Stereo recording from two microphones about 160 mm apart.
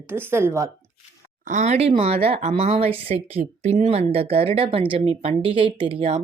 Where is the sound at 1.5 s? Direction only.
45° right (ahead or behind).